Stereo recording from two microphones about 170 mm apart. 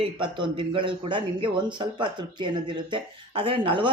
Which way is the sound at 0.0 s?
30° right (ahead or behind).